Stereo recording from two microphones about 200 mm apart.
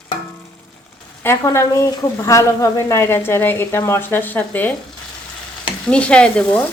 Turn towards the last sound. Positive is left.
turn(degrees=5)  # may be behind; listen again after turning